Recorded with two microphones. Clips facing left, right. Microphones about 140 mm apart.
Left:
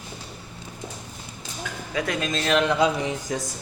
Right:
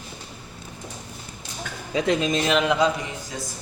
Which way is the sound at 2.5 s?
10° right (ahead or behind).